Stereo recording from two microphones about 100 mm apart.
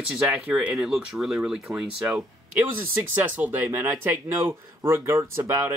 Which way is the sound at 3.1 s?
20° right (ahead or behind).